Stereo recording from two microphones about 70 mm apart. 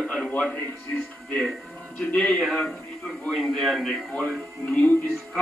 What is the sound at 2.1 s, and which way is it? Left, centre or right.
Speech, centre.